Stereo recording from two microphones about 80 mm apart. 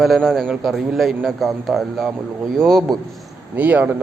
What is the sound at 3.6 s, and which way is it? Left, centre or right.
Speech, centre.